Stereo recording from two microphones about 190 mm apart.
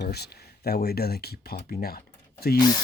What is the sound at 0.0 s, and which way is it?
Speech, 60° left (ahead or behind).